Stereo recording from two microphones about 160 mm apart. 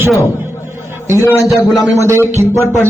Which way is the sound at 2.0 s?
15° right (ahead or behind).